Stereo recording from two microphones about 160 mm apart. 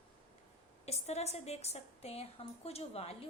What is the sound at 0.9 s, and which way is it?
A woman's voice, 40° left (ahead or behind).